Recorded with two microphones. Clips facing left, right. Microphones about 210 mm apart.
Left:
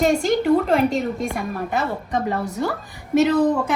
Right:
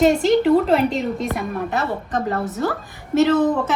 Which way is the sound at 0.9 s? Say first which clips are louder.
Even; 45° left (ahead or behind).